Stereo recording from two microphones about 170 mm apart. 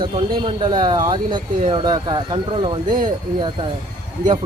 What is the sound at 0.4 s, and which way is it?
Speech, 25° right (ahead or behind).